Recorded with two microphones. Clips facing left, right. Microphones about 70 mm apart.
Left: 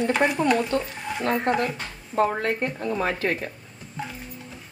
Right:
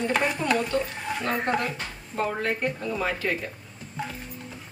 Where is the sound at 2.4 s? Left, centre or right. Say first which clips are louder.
Left 1 dB; left.